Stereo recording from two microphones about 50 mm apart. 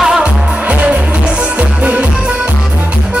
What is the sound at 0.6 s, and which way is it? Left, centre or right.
Music, right.